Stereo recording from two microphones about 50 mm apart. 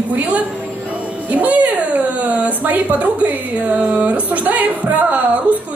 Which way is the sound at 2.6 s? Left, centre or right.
Right.